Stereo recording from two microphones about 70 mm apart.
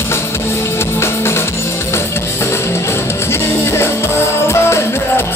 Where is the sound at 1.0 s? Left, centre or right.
Left.